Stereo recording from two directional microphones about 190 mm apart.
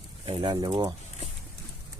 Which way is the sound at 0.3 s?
25° right (ahead or behind).